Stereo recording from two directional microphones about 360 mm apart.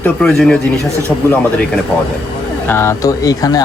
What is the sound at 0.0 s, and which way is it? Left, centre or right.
Speech, centre.